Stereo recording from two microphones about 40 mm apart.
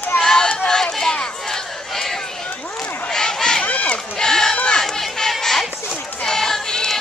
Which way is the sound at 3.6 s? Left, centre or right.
Left.